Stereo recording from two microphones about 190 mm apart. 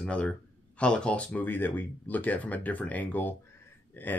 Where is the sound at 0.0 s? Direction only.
5° left (ahead or behind).